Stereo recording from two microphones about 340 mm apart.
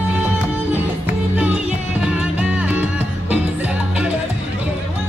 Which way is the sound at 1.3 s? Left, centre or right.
Centre.